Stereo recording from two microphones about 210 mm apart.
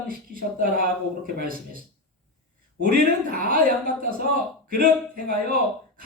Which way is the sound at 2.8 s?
40° right (ahead or behind).